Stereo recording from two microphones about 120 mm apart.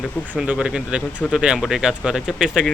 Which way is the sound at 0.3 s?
10° right (ahead or behind).